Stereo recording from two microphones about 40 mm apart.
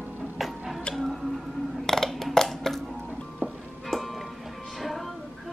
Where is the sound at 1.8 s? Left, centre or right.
Centre.